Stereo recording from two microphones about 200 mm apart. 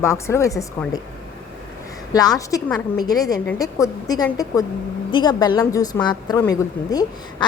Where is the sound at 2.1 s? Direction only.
20° left (ahead or behind).